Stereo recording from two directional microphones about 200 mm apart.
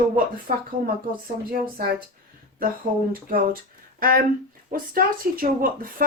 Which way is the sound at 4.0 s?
45° right (ahead or behind).